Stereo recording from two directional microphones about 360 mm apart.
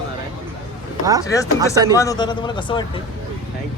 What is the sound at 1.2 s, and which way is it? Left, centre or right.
Speech, centre.